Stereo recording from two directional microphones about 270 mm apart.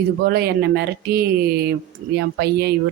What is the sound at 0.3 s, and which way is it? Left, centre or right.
Speech, right.